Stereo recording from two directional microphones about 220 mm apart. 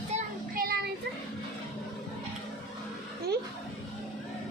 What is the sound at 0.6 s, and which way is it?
Child singing, 45° right (ahead or behind).